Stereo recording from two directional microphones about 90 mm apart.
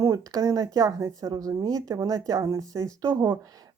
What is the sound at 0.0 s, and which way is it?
Speech, 40° right (ahead or behind).